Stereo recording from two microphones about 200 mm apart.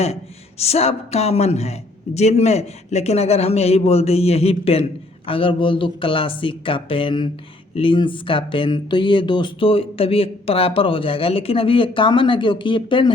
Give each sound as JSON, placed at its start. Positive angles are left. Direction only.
{"t": 0.6, "sound": "a man's voice", "side_deg": 30}